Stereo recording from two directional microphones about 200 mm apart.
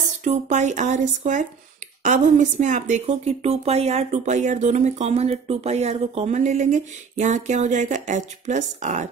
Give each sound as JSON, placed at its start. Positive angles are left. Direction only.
{"t": 0.2, "sound": "a woman's voice", "side_deg": -35}